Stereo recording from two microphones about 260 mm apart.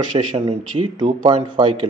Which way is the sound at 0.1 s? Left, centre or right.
Right.